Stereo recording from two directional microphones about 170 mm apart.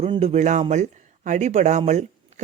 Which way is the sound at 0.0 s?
40° right (ahead or behind).